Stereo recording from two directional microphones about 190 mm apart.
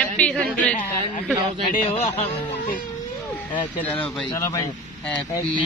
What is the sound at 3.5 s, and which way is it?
Speech, 10° left (ahead or behind).